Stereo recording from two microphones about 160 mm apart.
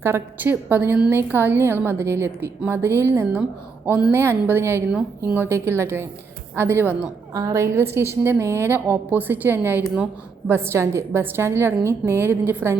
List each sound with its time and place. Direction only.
0.0 s a woman's voice: 15° right (ahead or behind)